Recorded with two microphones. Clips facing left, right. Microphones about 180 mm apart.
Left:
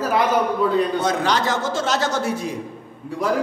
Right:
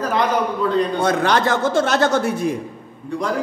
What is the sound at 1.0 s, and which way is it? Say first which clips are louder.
Speech: right 3 dB; 55° right (ahead or behind).